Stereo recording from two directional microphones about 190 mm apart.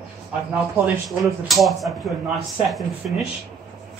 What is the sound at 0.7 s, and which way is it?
Speech, 5° right (ahead or behind).